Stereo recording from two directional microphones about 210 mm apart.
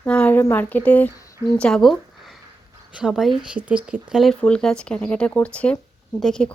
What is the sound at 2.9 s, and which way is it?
Speech, centre (ahead or behind).